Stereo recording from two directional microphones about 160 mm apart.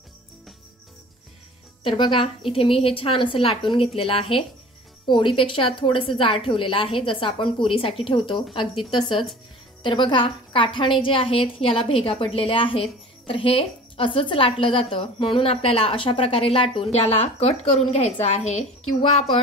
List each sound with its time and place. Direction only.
1.8 s a woman's voice: 30° left (ahead or behind)